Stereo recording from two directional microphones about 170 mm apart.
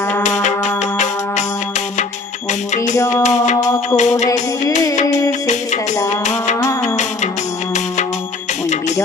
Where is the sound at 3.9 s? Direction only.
45° left (ahead or behind).